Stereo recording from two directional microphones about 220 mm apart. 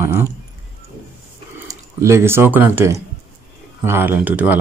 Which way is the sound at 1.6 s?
15° right (ahead or behind).